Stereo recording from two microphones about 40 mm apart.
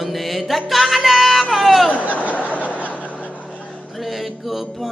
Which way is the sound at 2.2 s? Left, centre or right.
Left.